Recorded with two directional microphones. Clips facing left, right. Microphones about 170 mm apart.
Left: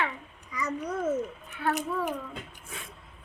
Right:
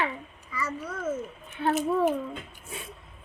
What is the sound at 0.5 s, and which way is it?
A child's voice, 15° left (ahead or behind).